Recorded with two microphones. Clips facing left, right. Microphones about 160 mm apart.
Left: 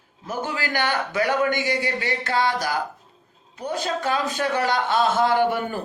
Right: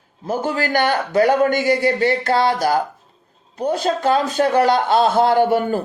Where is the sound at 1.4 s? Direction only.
35° right (ahead or behind).